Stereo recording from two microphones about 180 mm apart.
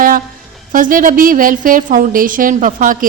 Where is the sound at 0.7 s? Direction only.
50° right (ahead or behind).